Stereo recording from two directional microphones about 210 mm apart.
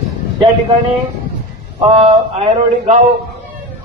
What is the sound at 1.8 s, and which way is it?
A man's voice, 30° right (ahead or behind).